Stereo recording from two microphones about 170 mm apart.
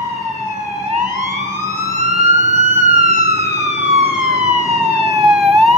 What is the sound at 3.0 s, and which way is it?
Emergency vehicle, 40° right (ahead or behind).